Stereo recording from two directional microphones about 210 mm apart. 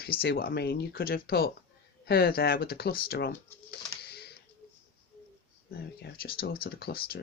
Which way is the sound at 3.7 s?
50° left (ahead or behind).